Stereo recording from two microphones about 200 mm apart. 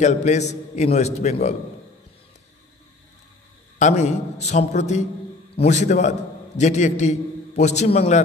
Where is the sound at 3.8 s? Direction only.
35° left (ahead or behind).